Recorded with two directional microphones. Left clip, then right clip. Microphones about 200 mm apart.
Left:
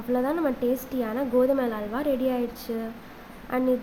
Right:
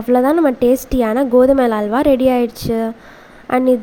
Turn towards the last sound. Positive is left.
turn(degrees=-40)  # may be behind; listen again after turning